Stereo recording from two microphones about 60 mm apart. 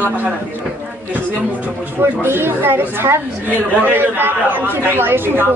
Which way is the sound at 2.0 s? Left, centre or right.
Right.